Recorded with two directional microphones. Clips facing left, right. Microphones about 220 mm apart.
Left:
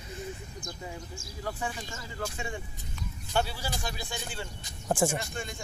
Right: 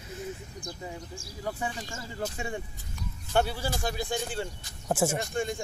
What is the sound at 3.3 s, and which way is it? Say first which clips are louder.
Speech: right 4 dB; 55° right (ahead or behind).